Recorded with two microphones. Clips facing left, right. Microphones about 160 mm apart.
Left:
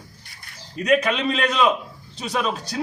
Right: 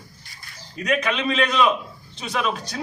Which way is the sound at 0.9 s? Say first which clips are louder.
Left 3 dB; 35° left (ahead or behind).